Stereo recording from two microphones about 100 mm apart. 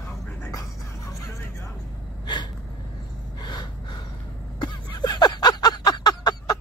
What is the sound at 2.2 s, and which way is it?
Gasp, 45° left (ahead or behind).